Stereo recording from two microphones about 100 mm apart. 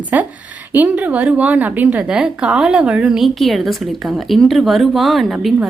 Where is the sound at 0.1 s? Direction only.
20° right (ahead or behind).